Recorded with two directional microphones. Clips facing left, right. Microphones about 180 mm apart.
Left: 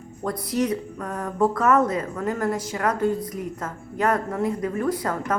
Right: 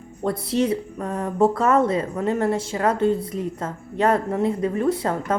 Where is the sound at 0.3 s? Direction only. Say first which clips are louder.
Right 3 dB; 25° right (ahead or behind).